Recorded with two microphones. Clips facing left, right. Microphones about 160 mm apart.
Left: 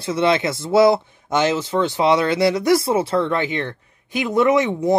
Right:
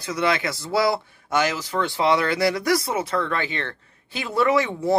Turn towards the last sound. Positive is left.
turn(degrees=20)  # may be behind; listen again after turning